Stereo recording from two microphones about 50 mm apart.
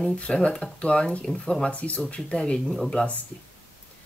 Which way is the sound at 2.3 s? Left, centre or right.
Centre.